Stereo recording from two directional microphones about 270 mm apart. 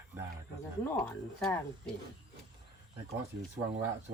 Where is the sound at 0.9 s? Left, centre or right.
Centre.